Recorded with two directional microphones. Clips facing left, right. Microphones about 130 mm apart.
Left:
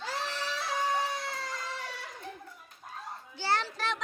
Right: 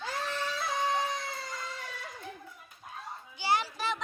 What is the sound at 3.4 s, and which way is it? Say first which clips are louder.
Children playing: right 1 dB; 10° right (ahead or behind).